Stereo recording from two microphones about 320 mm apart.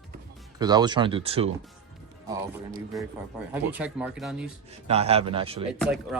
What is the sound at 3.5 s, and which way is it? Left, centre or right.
Speech, centre.